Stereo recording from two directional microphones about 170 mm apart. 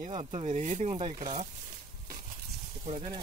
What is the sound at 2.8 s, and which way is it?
Speech, 30° right (ahead or behind).